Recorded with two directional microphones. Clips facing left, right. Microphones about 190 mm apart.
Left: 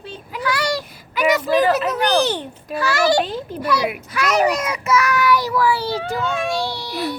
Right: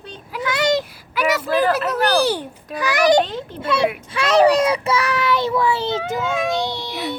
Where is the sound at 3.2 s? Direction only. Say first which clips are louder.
Left 2 dB; 10° left (ahead or behind).